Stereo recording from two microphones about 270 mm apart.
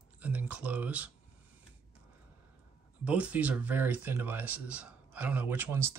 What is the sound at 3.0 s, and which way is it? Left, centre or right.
Speech, centre.